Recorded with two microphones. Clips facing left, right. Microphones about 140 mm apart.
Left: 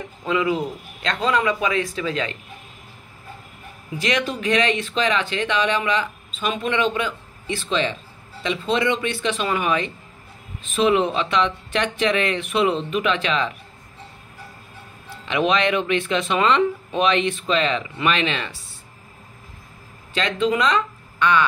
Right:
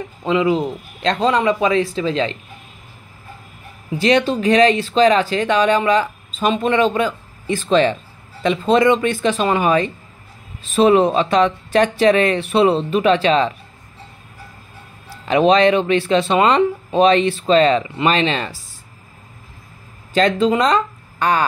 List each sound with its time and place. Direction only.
0.2 s speech: 25° right (ahead or behind)
4.0 s speech: 30° right (ahead or behind)
15.0 s speech: 35° right (ahead or behind)
20.2 s speech: 40° right (ahead or behind)